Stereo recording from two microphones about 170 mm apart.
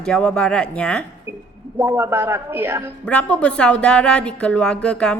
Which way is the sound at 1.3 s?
15° right (ahead or behind).